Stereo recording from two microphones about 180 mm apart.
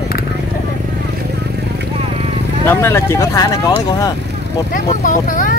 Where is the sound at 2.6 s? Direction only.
15° left (ahead or behind).